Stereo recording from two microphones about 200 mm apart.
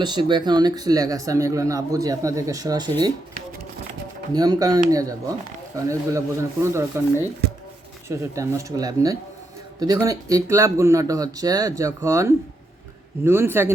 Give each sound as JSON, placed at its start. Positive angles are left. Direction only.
{"t": 0.0, "sound": "speech", "side_deg": -20}
{"t": 4.4, "sound": "speech", "side_deg": -20}
{"t": 8.0, "sound": "speech", "side_deg": -15}